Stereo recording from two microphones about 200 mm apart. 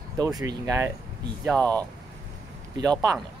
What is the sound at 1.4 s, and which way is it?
Speech, 5° left (ahead or behind).